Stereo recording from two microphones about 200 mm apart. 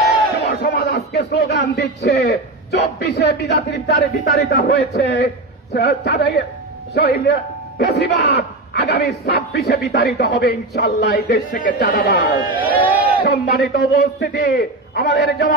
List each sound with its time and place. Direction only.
0.5 s a man's voice: 55° left (ahead or behind)
11.5 s a man's voice: 45° left (ahead or behind)